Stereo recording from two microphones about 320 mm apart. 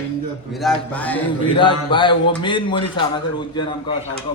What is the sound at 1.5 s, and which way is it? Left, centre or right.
Speech, centre.